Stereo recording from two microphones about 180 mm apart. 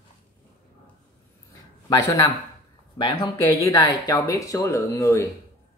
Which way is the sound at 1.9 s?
20° left (ahead or behind).